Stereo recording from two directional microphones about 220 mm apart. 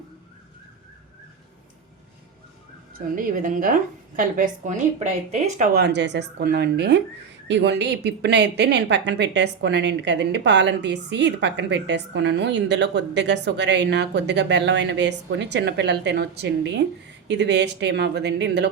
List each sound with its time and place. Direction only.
3.2 s a woman's voice: 40° right (ahead or behind)
5.7 s a woman's voice: 50° right (ahead or behind)